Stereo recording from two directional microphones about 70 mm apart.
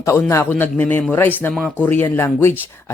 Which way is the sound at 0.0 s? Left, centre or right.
Left.